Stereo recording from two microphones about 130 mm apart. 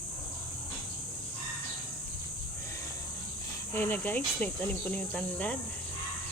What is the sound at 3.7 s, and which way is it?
Speech, 15° left (ahead or behind).